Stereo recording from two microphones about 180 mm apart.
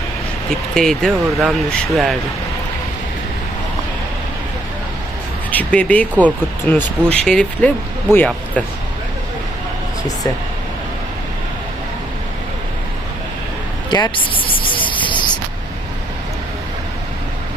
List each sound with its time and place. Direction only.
0.7 s speech: centre (ahead or behind)
5.5 s speech: 10° left (ahead or behind)
13.9 s speech: 25° left (ahead or behind)